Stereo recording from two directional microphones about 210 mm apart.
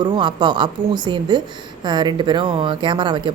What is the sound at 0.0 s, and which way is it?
A woman's voice, 20° right (ahead or behind).